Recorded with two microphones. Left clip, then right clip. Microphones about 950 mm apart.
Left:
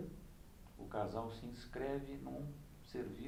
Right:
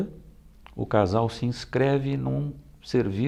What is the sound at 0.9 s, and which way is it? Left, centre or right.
Speech, right.